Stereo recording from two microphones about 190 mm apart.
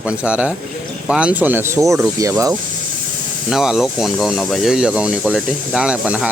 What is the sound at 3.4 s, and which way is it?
Speech, centre (ahead or behind).